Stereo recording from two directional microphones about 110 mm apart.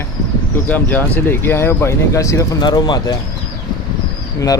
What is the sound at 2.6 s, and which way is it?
Speech, 40° left (ahead or behind).